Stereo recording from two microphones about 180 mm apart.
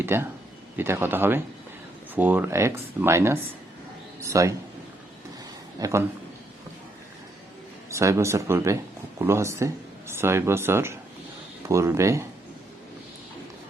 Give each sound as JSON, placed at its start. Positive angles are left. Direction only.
{"t": 0.0, "sound": "a man's voice", "side_deg": -15}
{"t": 5.8, "sound": "speech", "side_deg": -15}
{"t": 7.9, "sound": "speech", "side_deg": -15}